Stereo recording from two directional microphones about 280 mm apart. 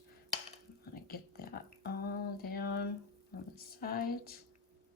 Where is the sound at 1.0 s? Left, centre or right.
Left.